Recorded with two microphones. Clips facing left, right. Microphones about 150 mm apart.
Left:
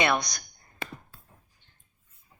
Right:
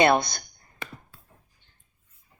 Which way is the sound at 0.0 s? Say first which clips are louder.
Right 6 dB; 30° right (ahead or behind).